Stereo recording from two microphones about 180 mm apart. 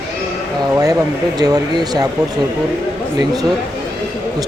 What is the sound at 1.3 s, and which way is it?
Speech, 20° right (ahead or behind).